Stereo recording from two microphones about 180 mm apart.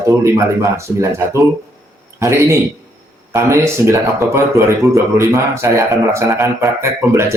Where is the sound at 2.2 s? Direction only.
15° right (ahead or behind).